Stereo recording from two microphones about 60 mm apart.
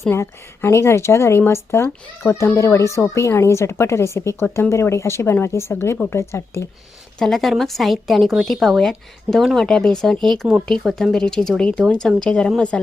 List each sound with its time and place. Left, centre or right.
0.1 s speech: left
7.2 s a woman's voice: centre